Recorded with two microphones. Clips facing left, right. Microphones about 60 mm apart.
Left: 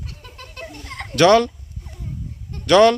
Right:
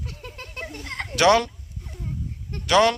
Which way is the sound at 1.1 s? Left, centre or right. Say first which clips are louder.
Left 4 dB; centre.